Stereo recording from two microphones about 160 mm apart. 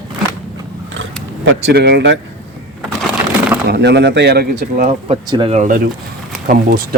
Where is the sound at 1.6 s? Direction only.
90° right.